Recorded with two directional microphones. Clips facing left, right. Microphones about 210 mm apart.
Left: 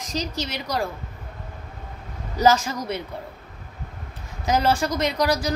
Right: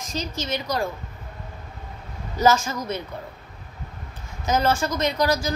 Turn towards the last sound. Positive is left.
turn(degrees=35)  # may be behind; listen again after turning